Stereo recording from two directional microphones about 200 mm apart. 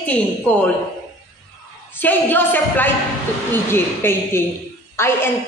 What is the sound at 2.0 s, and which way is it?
A woman's voice, 10° left (ahead or behind).